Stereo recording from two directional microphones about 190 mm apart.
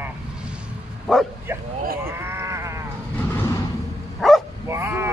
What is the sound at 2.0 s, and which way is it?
Sheep, 15° right (ahead or behind).